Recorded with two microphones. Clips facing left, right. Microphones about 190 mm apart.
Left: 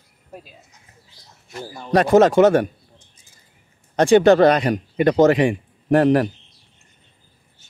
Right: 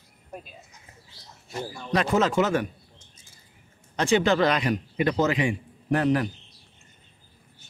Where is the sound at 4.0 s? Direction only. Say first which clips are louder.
Left 9 dB; 50° left (ahead or behind).